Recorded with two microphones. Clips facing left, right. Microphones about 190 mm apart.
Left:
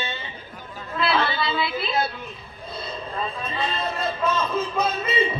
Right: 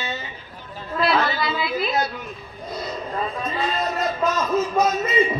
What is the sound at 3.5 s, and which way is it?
Speech, 30° left (ahead or behind).